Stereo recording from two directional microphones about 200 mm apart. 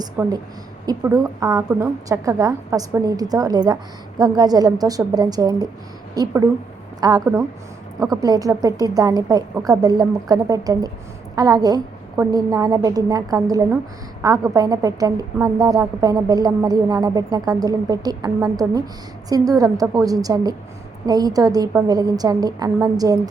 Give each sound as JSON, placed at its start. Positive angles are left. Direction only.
{"t": 0.0, "sound": "a woman's voice", "side_deg": -20}